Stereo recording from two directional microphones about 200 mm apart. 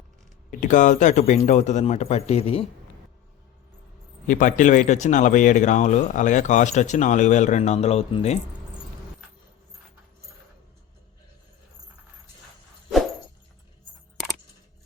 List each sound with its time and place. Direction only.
0.6 s speech: 40° left (ahead or behind)
4.3 s speech: 40° left (ahead or behind)